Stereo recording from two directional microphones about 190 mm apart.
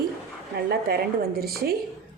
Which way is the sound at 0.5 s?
55° right (ahead or behind).